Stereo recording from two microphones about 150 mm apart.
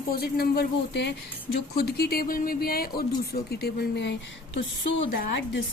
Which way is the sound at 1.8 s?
90° left.